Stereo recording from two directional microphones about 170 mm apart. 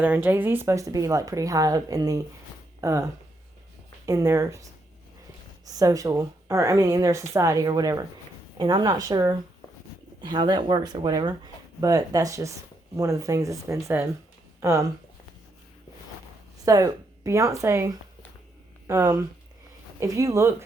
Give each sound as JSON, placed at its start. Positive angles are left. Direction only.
{"t": 0.0, "sound": "speech", "side_deg": -10}
{"t": 16.6, "sound": "speech", "side_deg": -20}